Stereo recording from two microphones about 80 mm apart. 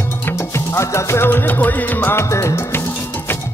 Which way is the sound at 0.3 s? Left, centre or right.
Left.